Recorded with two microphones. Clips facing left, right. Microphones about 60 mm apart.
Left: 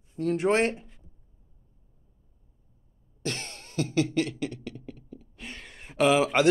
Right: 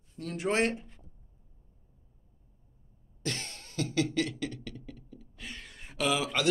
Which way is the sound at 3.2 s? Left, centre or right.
Left.